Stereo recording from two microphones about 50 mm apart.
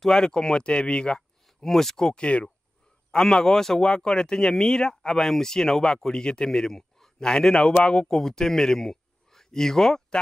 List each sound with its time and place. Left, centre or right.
0.0 s speech: centre
1.6 s speech: centre
2.1 s speech: left
3.1 s speech: centre